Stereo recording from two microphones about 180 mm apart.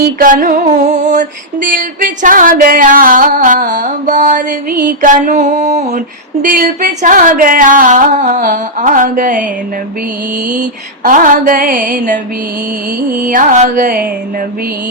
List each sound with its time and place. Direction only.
0.0 s music: 55° right (ahead or behind)
4.8 s mantra: 50° right (ahead or behind)
6.4 s music: 50° right (ahead or behind)
11.0 s music: 50° right (ahead or behind)
13.2 s music: 45° right (ahead or behind)